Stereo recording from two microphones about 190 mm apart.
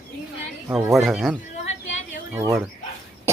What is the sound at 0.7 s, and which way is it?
Speech, 15° right (ahead or behind).